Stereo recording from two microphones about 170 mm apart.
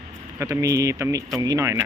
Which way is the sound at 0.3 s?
20° right (ahead or behind).